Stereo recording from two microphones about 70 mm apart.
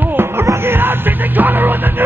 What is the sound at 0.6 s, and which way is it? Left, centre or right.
Music, right.